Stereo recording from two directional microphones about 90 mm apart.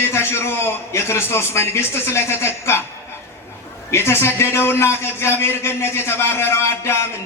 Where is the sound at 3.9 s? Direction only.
30° left (ahead or behind).